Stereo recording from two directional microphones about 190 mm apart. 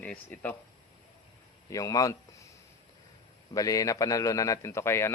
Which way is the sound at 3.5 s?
15° left (ahead or behind).